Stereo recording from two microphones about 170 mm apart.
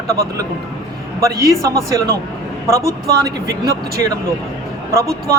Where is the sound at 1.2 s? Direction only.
20° right (ahead or behind).